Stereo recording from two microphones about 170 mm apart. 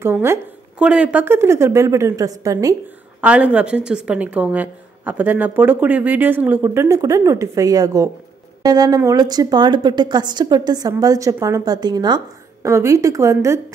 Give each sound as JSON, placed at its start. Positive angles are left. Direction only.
{"t": 0.0, "sound": "a woman's voice", "side_deg": -15}
{"t": 3.2, "sound": "a woman's voice", "side_deg": -5}